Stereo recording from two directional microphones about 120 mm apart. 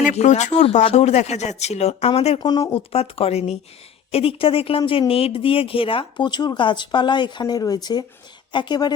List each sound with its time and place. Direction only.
0.0 s speech: 80° left; by 2.4 s 60° left (ahead or behind)
2.4 s speech: 35° left (ahead or behind)
2.7 s a woman's voice: 55° left (ahead or behind); by 9.0 s 35° left (ahead or behind)